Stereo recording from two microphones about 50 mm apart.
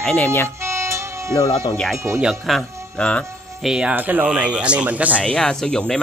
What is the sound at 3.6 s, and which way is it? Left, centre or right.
A man's voice, centre.